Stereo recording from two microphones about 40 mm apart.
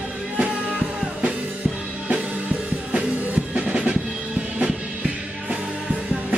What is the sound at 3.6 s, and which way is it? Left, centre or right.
Drum, right.